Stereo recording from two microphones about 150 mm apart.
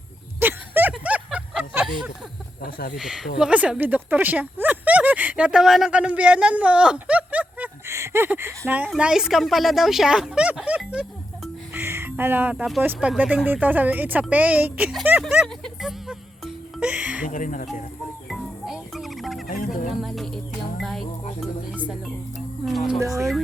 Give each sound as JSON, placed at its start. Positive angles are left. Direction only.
{"t": 0.3, "sound": "a sound", "side_deg": -15}
{"t": 2.6, "sound": "speech", "side_deg": 85}
{"t": 2.9, "sound": "speech", "side_deg": -5}
{"t": 11.7, "sound": "music", "side_deg": -15}
{"t": 12.8, "sound": "speech", "side_deg": -10}
{"t": 15.6, "sound": "music", "side_deg": 0}
{"t": 17.2, "sound": "speech", "side_deg": 65}
{"t": 18.3, "sound": "music", "side_deg": 0}
{"t": 19.5, "sound": "music", "side_deg": 65}
{"t": 20.0, "sound": "music", "side_deg": 0}
{"t": 22.6, "sound": "speech", "side_deg": 0}